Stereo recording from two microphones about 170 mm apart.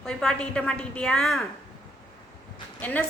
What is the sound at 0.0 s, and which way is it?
A woman's voice, centre (ahead or behind).